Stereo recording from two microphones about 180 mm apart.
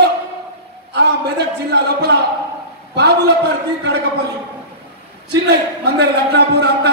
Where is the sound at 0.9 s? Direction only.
70° right (ahead or behind).